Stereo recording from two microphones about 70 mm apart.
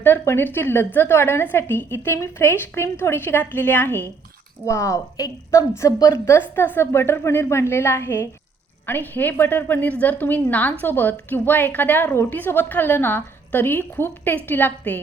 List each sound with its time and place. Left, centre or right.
0.0 s a woman's voice: left
4.6 s a woman's voice: left
6.2 s a woman's voice: left